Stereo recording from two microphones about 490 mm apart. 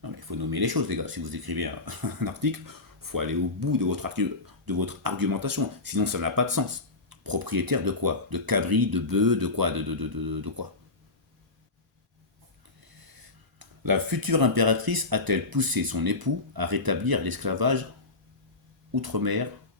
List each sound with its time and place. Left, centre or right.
0.0 s speech: right
12.8 s speech: right
18.9 s speech: right